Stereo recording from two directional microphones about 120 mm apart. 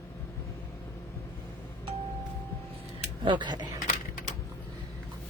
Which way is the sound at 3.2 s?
40° right (ahead or behind).